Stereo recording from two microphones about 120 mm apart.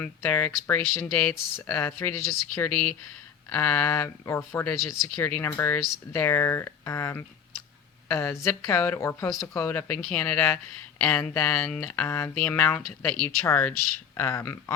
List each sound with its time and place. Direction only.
0.0 s speech: 15° left (ahead or behind)
3.5 s a woman's voice: 15° left (ahead or behind)